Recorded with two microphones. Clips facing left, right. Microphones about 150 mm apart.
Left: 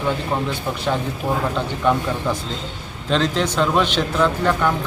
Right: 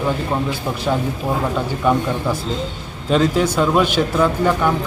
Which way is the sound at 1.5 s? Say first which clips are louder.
Right 2 dB; 5° right (ahead or behind).